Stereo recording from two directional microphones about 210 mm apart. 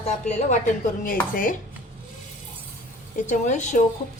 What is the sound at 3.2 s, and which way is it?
Speech, 35° left (ahead or behind).